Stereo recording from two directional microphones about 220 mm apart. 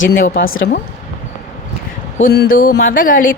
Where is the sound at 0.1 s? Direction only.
45° left (ahead or behind).